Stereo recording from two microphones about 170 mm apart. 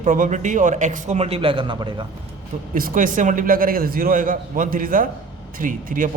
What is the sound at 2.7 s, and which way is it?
A man's voice, 55° right (ahead or behind).